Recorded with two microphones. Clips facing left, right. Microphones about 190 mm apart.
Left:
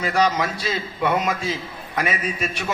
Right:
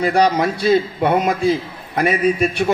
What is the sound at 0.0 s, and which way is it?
Speech, 35° right (ahead or behind).